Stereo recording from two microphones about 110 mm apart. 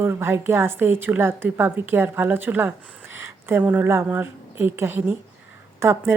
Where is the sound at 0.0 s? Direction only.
20° right (ahead or behind).